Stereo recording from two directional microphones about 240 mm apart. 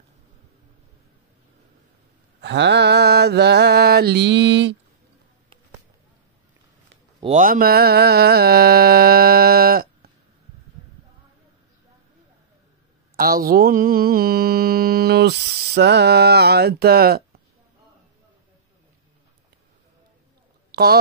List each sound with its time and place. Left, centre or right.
2.4 s mantra: right
7.2 s mantra: right
13.1 s mantra: right
20.7 s speech: right